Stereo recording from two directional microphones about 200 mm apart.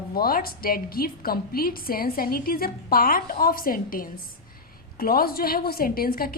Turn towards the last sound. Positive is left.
turn(degrees=45)  # may be behind; listen again after turning